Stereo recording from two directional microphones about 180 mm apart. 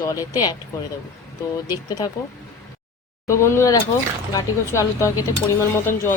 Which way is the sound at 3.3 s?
15° left (ahead or behind).